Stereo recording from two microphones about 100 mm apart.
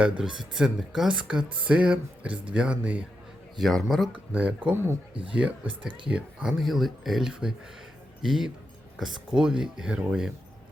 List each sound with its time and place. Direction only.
0.0 s speech: 5° right (ahead or behind)
3.6 s speech: centre (ahead or behind)
4.1 s speech: 10° right (ahead or behind)
4.7 s speech: 25° right (ahead or behind)
5.3 s speech: 10° right (ahead or behind)